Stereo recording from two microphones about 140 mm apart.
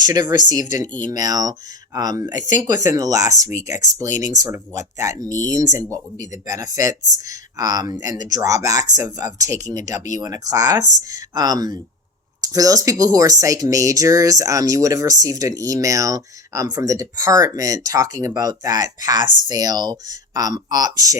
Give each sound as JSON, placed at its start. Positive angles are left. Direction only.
{"t": 0.0, "sound": "speech", "side_deg": -30}